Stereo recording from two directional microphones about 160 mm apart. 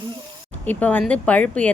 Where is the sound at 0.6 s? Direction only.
10° left (ahead or behind).